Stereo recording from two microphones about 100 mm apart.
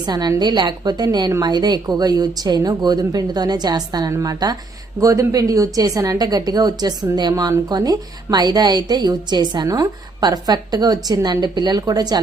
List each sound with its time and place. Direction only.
0.0 s a woman's voice: 45° right (ahead or behind)